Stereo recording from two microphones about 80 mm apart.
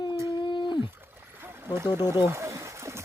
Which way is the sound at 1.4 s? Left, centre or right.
Right.